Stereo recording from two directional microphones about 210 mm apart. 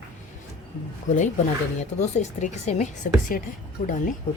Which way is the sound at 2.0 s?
35° left (ahead or behind).